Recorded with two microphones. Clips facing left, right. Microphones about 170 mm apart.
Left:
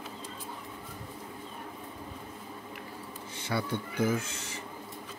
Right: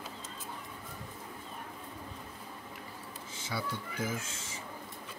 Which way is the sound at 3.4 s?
60° left (ahead or behind).